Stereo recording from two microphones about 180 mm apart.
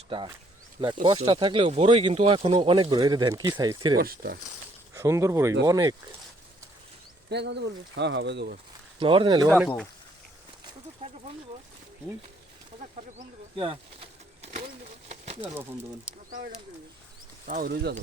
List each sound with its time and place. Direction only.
1.0 s speech: 25° right (ahead or behind)
3.9 s speech: 55° right (ahead or behind)
4.9 s speech: 15° right (ahead or behind)
7.3 s speech: 70° right (ahead or behind)
9.0 s speech: 30° right (ahead or behind)
9.6 s speech: centre (ahead or behind)
13.6 s a sound: 30° right (ahead or behind)
17.4 s speech: 50° right (ahead or behind)